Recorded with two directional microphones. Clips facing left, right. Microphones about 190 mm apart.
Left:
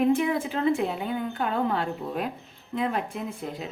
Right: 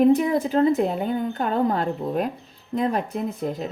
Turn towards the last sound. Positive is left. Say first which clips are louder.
# right 6 dB
turn(degrees=-40)  # may be behind; listen again after turning